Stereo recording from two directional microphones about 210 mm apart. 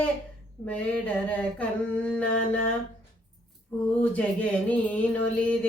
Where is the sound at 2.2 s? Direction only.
5° left (ahead or behind).